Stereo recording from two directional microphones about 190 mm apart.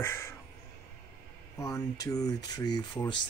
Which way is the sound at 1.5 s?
15° left (ahead or behind).